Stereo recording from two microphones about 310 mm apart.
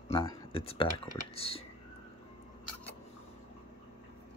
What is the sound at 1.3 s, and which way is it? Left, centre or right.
Speech, centre.